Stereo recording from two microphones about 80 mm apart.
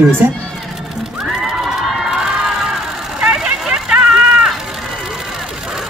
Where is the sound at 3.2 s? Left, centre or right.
Centre.